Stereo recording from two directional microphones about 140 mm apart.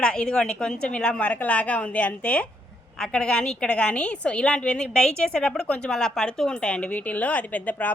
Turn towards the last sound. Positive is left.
turn(degrees=10)  # may be behind; listen again after turning